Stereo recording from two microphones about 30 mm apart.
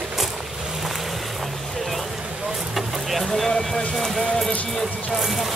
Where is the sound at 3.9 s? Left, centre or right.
Centre.